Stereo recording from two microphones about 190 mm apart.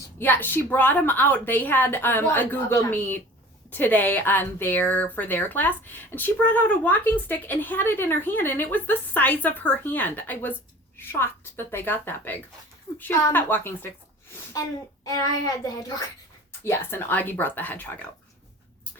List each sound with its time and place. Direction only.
0.2 s speech: 10° left (ahead or behind)
15.0 s a child's voice: 20° left (ahead or behind)